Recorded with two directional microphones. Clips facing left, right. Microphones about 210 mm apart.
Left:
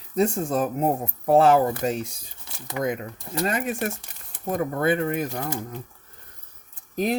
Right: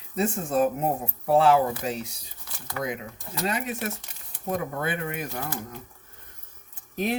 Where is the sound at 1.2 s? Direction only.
45° left (ahead or behind).